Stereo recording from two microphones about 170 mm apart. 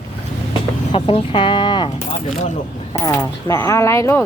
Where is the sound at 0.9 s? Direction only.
30° left (ahead or behind).